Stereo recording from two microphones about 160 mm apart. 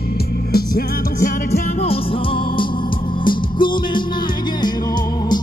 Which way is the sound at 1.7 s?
35° left (ahead or behind).